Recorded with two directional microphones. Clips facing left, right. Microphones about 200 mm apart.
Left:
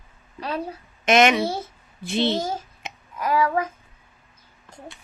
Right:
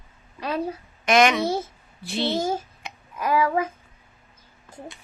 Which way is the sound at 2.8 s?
20° left (ahead or behind).